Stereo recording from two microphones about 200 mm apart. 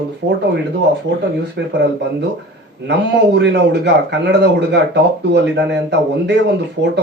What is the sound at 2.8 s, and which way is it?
Speech, 60° right (ahead or behind).